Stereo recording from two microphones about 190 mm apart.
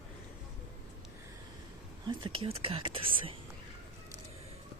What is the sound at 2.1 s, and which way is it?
Speech, 25° right (ahead or behind).